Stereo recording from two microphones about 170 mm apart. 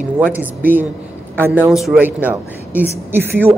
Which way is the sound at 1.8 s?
Centre (ahead or behind).